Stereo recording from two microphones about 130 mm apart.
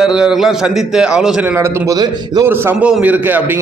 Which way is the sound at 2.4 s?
20° right (ahead or behind).